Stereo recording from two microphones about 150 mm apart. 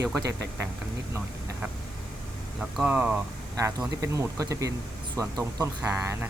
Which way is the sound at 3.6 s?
20° right (ahead or behind).